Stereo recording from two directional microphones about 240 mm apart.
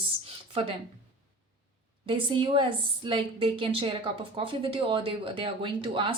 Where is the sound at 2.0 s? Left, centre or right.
Right.